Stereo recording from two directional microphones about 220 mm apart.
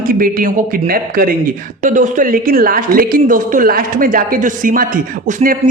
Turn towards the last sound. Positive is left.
turn(degrees=-35)  # may be behind; listen again after turning